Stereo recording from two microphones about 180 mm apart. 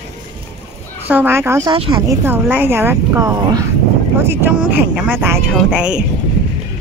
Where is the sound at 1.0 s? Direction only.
10° right (ahead or behind).